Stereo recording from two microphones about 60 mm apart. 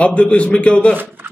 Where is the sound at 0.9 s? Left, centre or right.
Right.